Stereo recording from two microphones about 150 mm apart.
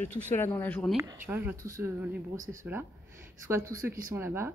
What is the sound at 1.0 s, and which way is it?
Speech, 15° right (ahead or behind).